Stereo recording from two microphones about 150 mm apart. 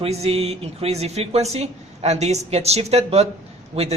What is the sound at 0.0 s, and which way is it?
A woman's voice, 45° right (ahead or behind).